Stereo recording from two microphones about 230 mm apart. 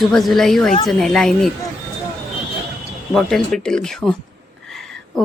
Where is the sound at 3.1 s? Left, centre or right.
Centre.